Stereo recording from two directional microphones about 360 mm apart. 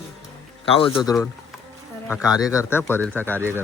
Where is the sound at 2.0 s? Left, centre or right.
Centre.